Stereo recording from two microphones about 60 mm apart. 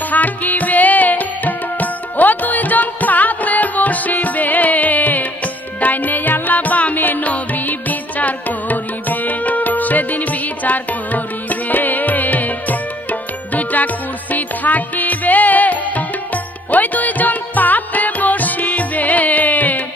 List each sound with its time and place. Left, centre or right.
0.1 s music: left